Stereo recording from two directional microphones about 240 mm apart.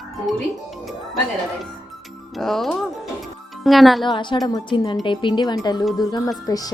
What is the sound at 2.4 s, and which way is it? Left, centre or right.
Music, centre.